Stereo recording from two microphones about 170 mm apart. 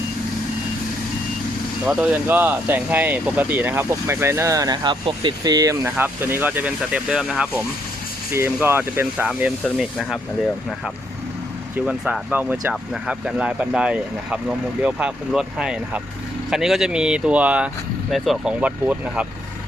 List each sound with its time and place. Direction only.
1.8 s speech: 5° right (ahead or behind)
11.9 s speech: 5° right (ahead or behind)